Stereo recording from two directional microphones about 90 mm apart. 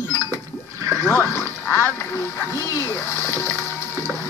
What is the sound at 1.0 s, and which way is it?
Dog, 25° left (ahead or behind).